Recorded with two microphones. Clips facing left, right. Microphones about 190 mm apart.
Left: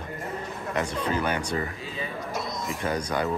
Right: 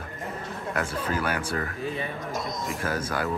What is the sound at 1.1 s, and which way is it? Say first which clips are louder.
Speech: left 1 dB; 5° right (ahead or behind).